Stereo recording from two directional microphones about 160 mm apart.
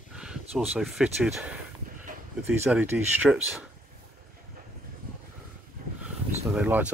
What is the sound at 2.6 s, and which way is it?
Speech, 15° right (ahead or behind).